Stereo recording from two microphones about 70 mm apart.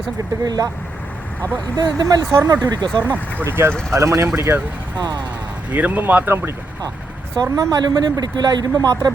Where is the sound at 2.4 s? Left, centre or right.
Right.